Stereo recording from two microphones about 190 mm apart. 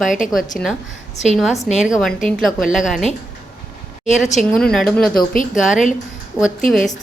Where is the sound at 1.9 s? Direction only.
Centre (ahead or behind).